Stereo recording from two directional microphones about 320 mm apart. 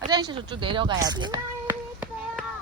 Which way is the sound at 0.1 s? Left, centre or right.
Centre.